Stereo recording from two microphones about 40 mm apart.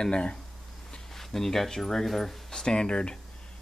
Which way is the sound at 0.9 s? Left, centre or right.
Centre.